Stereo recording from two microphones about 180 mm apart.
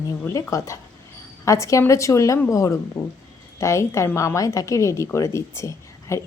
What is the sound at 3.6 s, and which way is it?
A woman's voice, 15° left (ahead or behind).